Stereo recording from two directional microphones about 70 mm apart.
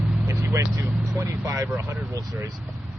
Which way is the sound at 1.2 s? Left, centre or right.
Right.